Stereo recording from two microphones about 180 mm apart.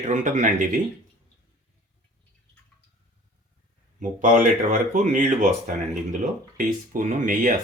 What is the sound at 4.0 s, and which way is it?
Speech, 45° right (ahead or behind).